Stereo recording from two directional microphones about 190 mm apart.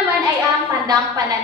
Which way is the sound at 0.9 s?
20° right (ahead or behind).